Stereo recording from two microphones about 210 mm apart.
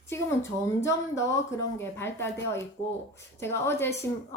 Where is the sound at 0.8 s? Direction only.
15° left (ahead or behind).